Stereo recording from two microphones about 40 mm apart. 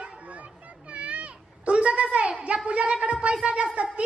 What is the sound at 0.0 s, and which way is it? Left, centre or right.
Children playing, right.